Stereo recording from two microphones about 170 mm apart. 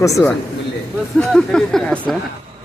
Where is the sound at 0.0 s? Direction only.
15° left (ahead or behind).